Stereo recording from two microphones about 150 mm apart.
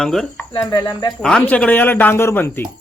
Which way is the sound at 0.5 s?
25° left (ahead or behind).